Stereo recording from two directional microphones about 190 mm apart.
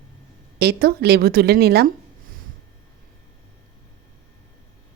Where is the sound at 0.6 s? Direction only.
55° right (ahead or behind).